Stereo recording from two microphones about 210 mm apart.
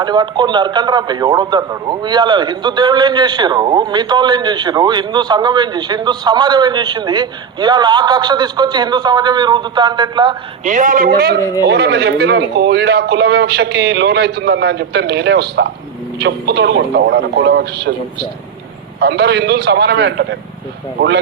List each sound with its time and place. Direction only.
0.0 s a man's voice: 20° right (ahead or behind)
10.6 s a man's voice: 35° right (ahead or behind)
18.9 s a man's voice: 50° right (ahead or behind)